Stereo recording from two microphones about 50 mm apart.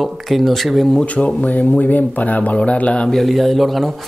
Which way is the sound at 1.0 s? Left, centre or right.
Left.